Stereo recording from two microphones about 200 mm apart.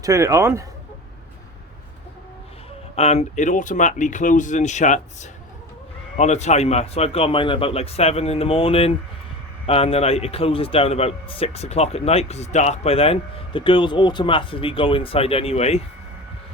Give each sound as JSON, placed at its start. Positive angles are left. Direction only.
{"t": 0.0, "sound": "a man's voice", "side_deg": -15}
{"t": 2.9, "sound": "a man's voice", "side_deg": 30}